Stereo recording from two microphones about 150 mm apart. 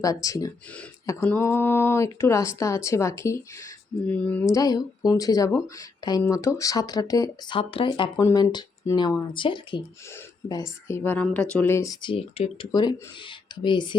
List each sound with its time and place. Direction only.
0.0 s speech: 25° left (ahead or behind)
7.6 s speech: 40° left (ahead or behind)
10.5 s speech: 20° left (ahead or behind)
12.0 s speech: 35° left (ahead or behind)